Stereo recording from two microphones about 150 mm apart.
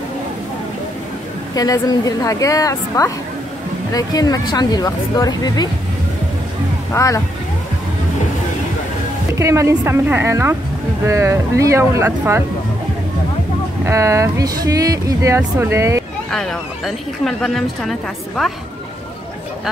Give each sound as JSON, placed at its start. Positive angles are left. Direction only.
{"t": 1.5, "sound": "speech", "side_deg": 25}
{"t": 6.9, "sound": "speech", "side_deg": 20}
{"t": 9.4, "sound": "speech", "side_deg": -20}
{"t": 13.8, "sound": "speech", "side_deg": -20}
{"t": 16.3, "sound": "speech", "side_deg": 0}